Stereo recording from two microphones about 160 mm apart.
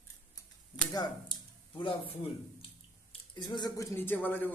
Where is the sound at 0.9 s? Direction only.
25° left (ahead or behind).